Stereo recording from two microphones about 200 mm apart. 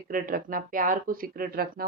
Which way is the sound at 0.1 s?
45° right (ahead or behind).